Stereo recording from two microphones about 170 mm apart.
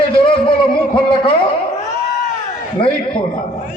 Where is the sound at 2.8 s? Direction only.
30° left (ahead or behind).